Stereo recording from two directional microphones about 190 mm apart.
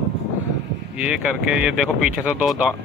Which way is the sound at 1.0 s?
5° right (ahead or behind).